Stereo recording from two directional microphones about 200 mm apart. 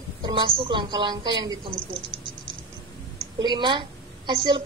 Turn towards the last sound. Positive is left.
turn(degrees=-25)  # may be behind; listen again after turning